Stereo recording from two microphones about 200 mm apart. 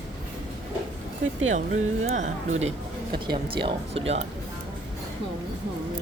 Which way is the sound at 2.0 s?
35° right (ahead or behind).